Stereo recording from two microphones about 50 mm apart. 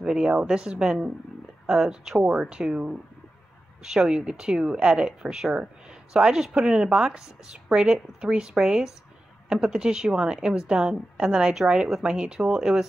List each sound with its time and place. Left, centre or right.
0.0 s speech: centre